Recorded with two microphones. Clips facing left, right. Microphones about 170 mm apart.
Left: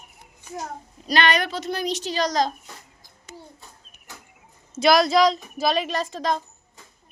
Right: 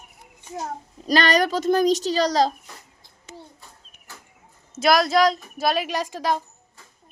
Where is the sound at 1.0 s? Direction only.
40° right (ahead or behind).